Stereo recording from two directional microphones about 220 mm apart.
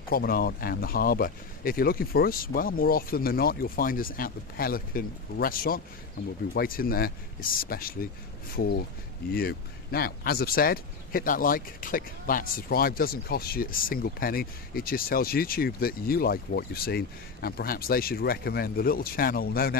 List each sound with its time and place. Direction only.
0.1 s speech: 40° left (ahead or behind)